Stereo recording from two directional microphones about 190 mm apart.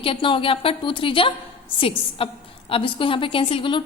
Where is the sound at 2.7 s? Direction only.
30° left (ahead or behind).